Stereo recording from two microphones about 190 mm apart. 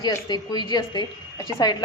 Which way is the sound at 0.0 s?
20° left (ahead or behind).